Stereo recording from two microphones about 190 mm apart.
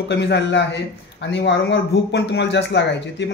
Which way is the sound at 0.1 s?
65° left (ahead or behind).